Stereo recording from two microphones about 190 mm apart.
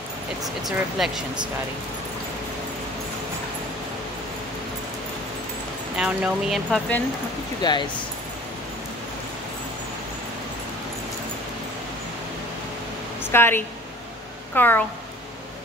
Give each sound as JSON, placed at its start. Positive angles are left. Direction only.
{"t": 0.7, "sound": "speech", "side_deg": 0}
{"t": 5.9, "sound": "speech", "side_deg": -5}
{"t": 7.6, "sound": "speech", "side_deg": 20}
{"t": 13.2, "sound": "a woman's voice", "side_deg": 10}